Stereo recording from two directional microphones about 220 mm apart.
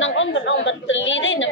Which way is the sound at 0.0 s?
60° left (ahead or behind).